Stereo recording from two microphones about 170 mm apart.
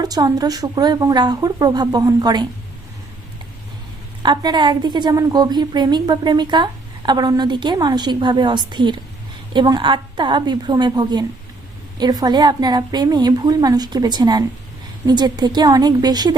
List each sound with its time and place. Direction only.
0.0 s a woman's voice: 20° right (ahead or behind)
4.2 s a woman's voice: 25° right (ahead or behind)